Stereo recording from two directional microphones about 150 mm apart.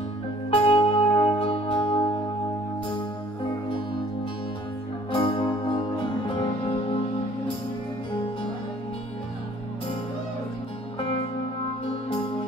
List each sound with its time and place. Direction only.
0.5 s music: 40° left (ahead or behind)
5.1 s music: 30° left (ahead or behind)